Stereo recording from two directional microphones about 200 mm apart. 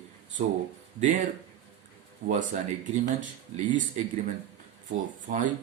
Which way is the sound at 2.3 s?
40° right (ahead or behind).